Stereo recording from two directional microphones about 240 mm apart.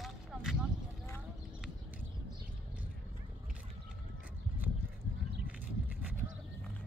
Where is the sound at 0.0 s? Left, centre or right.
Centre.